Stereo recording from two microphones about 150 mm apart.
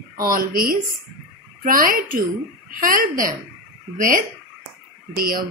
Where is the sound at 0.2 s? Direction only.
70° right (ahead or behind).